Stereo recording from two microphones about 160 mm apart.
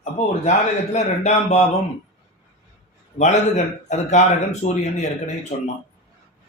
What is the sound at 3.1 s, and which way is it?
Speech, 45° left (ahead or behind).